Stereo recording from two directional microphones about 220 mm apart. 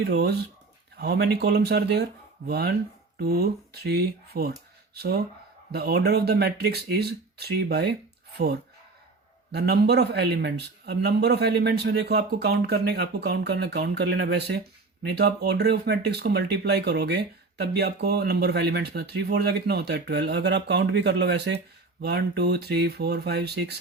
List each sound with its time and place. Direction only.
0.0 s speech: 45° right (ahead or behind)
5.7 s speech: 45° right (ahead or behind)
9.5 s speech: 45° right (ahead or behind)